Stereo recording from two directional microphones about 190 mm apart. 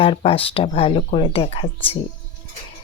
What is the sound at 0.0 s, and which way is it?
Speech, 30° left (ahead or behind).